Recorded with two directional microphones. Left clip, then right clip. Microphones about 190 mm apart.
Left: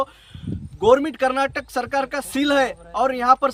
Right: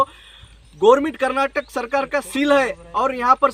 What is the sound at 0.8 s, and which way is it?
Speech, 25° left (ahead or behind).